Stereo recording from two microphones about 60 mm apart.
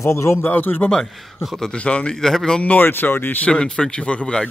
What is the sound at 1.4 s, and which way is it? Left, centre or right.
Speech, centre.